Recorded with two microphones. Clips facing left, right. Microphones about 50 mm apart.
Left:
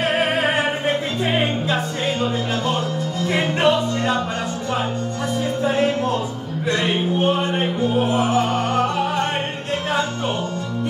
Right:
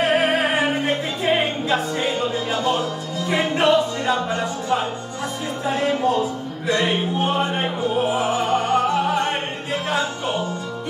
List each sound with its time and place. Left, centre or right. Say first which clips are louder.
1.7 s music: right 1 dB; centre
6.7 s music: even; centre